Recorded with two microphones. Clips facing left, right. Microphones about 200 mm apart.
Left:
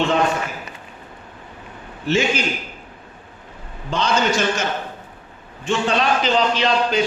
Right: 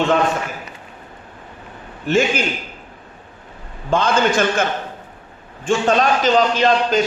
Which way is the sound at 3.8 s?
50° right (ahead or behind).